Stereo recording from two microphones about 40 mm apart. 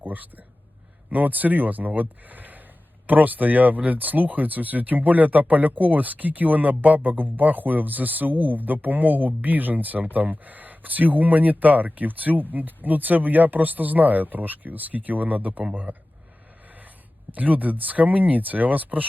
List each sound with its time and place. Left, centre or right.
0.0 s speech: right
16.6 s a sound: right
17.3 s speech: right